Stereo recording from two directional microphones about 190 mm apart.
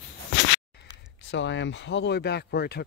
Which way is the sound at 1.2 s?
70° left (ahead or behind).